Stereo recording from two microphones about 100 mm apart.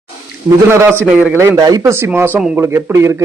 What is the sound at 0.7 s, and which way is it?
Speech, 25° right (ahead or behind).